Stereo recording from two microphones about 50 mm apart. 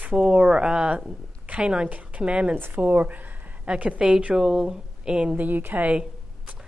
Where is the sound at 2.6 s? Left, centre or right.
Right.